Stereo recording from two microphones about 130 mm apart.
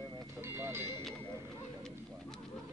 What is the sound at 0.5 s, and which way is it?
Music, 20° right (ahead or behind).